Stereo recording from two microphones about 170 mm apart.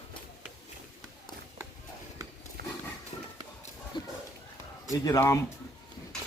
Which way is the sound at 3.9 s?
25° left (ahead or behind).